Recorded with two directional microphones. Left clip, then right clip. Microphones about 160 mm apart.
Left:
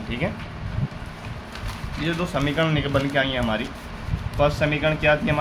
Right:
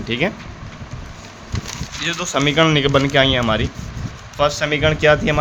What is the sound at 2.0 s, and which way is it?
Speech, 65° right (ahead or behind).